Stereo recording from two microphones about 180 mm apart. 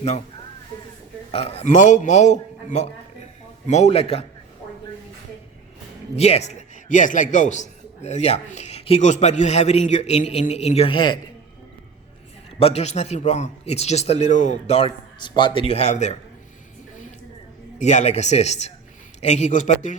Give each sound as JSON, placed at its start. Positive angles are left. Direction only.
{"t": 1.3, "sound": "a man's voice", "side_deg": 35}
{"t": 6.1, "sound": "a man's voice", "side_deg": 35}
{"t": 12.5, "sound": "a man's voice", "side_deg": 35}
{"t": 17.7, "sound": "a man's voice", "side_deg": 40}